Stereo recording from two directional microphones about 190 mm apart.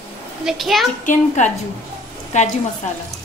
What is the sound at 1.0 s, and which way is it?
Speech, 40° left (ahead or behind).